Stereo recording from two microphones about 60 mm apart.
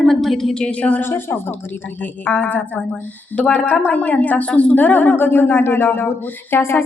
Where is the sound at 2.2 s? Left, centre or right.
Left.